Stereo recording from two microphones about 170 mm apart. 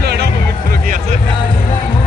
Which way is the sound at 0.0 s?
75° right (ahead or behind).